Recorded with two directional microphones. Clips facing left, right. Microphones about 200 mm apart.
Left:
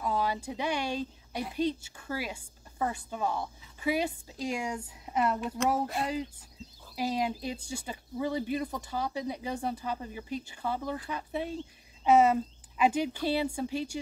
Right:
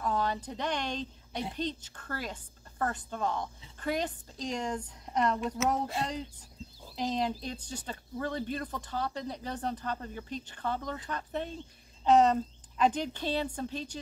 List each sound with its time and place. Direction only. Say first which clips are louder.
0.0 s a woman's voice: left 1 dB; 10° left (ahead or behind)
7.0 s speech: left 1 dB; 10° left (ahead or behind)